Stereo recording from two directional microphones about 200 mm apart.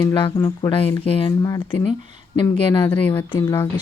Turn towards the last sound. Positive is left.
turn(degrees=15)  # may be behind; listen again after turning